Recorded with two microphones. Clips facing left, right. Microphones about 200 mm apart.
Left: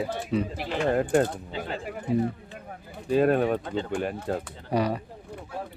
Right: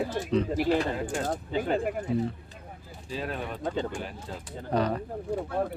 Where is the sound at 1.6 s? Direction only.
55° right (ahead or behind).